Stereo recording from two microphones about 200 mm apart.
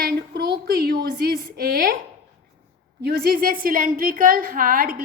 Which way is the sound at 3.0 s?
50° right (ahead or behind).